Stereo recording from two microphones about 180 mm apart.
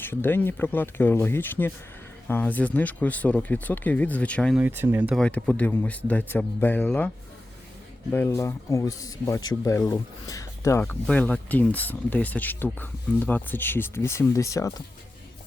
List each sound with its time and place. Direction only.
0.0 s speech: 10° left (ahead or behind)
4.5 s speech: 10° right (ahead or behind)
5.1 s speech: 5° left (ahead or behind)
8.1 s speech: 15° left (ahead or behind)